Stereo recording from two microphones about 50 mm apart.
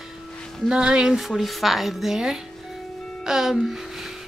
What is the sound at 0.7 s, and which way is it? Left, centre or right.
Speech, centre.